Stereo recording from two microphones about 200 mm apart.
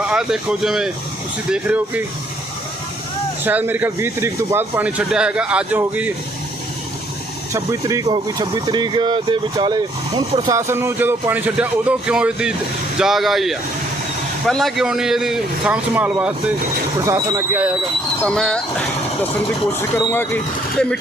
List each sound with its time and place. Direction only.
0.1 s a man's voice: 5° right (ahead or behind)
3.4 s speech: 10° right (ahead or behind)
7.5 s a man's voice: 15° right (ahead or behind)
18.2 s a man's voice: 5° left (ahead or behind)
20.0 s speech: 10° left (ahead or behind)